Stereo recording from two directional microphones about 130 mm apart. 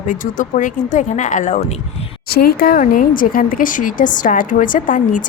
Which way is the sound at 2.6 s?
90° left.